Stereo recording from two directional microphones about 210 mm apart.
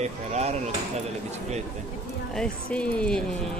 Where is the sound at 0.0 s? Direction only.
30° right (ahead or behind).